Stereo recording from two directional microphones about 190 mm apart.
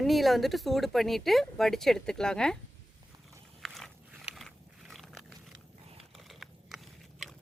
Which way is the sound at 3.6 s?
Centre (ahead or behind).